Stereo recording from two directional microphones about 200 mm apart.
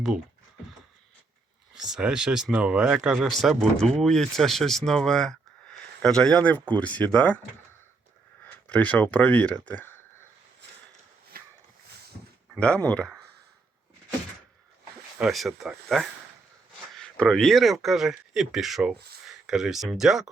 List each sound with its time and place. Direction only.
1.7 s speech: 5° right (ahead or behind)
8.6 s speech: 5° left (ahead or behind)
11.3 s a sound: 45° right (ahead or behind)
12.5 s speech: 5° left (ahead or behind)
15.2 s speech: centre (ahead or behind)